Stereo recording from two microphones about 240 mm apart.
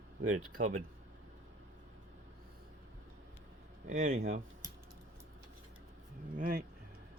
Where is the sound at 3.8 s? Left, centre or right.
Right.